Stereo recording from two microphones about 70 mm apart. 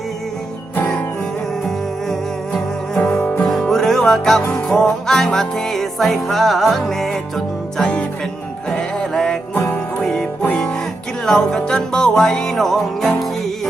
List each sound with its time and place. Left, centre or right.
1.6 s music: centre